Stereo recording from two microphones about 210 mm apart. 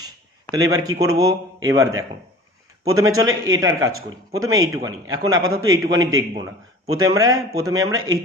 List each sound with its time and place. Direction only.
0.5 s speech: 15° right (ahead or behind)
5.5 s a man's voice: 75° right (ahead or behind)
6.0 s speech: 15° right (ahead or behind)